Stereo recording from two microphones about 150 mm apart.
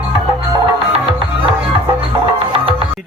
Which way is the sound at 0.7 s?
40° right (ahead or behind).